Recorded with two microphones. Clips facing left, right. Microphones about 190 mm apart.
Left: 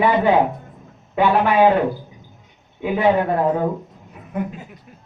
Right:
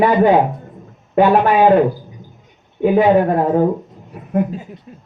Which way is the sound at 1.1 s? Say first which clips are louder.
Right 4 dB; 45° right (ahead or behind).